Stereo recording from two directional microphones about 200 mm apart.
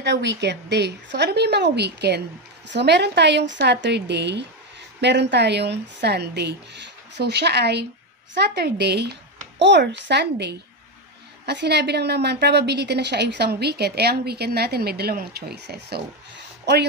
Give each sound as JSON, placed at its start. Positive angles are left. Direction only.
{"t": 0.0, "sound": "a woman's voice", "side_deg": -60}